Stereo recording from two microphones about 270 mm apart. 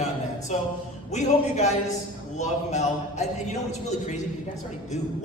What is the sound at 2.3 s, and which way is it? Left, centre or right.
Speech, left.